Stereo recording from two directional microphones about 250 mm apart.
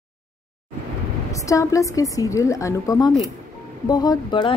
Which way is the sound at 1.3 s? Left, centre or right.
Centre.